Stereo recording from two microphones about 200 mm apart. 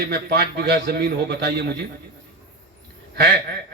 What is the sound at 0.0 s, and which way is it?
A man's voice, 55° right (ahead or behind).